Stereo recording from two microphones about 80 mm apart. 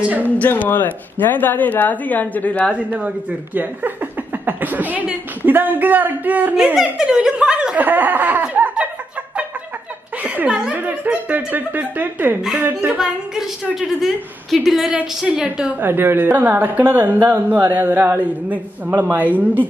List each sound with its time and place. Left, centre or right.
0.0 s speech: centre
0.4 s speech: left
2.7 s speech: centre
6.5 s speech: centre
10.2 s speech: centre
13.0 s a woman's voice: centre
15.8 s speech: right